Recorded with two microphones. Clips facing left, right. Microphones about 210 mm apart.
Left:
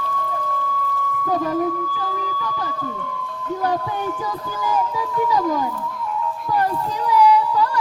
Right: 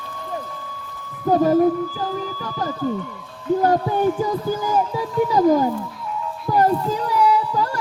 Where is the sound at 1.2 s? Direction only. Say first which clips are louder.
Right 6 dB; 40° right (ahead or behind).